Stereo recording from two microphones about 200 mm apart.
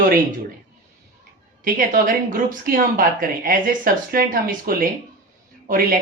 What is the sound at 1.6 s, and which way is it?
A woman's voice, 45° right (ahead or behind).